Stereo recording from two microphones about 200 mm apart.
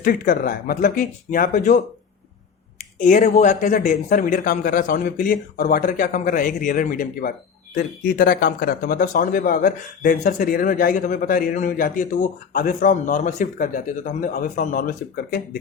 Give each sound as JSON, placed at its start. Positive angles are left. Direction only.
{"t": 0.0, "sound": "speech", "side_deg": 50}
{"t": 3.0, "sound": "speech", "side_deg": 40}